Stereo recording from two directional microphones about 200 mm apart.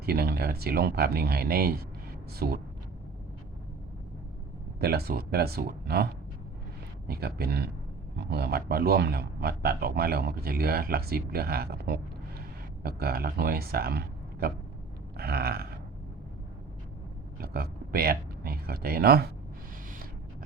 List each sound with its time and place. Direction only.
0.0 s a man's voice: 50° right (ahead or behind)
4.8 s a man's voice: 50° right (ahead or behind)
7.1 s a man's voice: 50° right (ahead or behind)
17.4 s speech: 50° right (ahead or behind)